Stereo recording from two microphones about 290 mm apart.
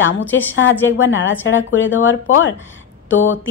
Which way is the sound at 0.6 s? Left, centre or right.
Left.